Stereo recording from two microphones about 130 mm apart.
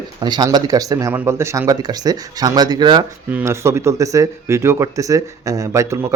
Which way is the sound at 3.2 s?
20° right (ahead or behind).